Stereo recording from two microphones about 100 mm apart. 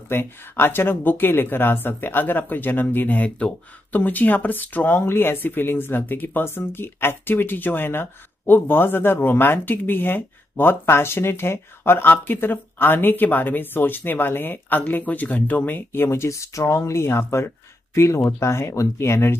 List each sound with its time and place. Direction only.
0.1 s speech: 20° left (ahead or behind)